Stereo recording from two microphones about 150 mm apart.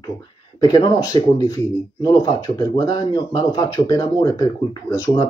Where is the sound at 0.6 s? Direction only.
25° left (ahead or behind).